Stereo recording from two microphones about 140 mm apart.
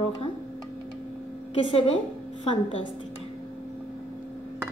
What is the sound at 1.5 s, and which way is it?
Speech, 40° left (ahead or behind).